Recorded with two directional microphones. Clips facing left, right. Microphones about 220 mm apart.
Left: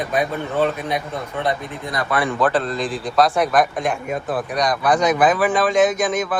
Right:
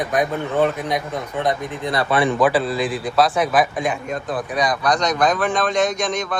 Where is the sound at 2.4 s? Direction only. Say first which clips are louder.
Right 2 dB; 10° right (ahead or behind).